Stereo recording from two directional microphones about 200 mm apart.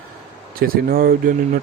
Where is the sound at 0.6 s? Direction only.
45° right (ahead or behind).